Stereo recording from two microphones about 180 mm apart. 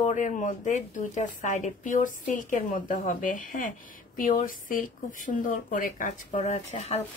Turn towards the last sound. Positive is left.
turn(degrees=35)  # may be behind; listen again after turning